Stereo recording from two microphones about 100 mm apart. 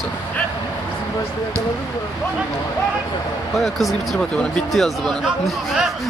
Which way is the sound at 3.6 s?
Centre (ahead or behind).